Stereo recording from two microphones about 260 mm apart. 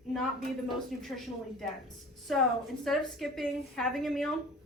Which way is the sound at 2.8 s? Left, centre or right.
Centre.